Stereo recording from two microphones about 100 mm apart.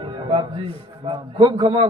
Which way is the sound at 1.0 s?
60° right (ahead or behind).